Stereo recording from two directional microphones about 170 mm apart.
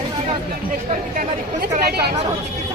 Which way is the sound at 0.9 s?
50° right (ahead or behind).